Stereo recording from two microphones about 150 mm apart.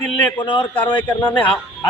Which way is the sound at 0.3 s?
35° left (ahead or behind).